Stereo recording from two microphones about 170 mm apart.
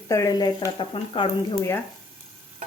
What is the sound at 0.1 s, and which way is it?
Speech, 20° left (ahead or behind).